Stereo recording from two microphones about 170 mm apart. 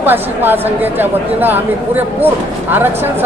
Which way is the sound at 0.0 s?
10° right (ahead or behind).